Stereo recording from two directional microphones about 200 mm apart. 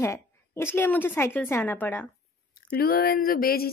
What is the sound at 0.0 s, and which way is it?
A woman's voice, 10° left (ahead or behind).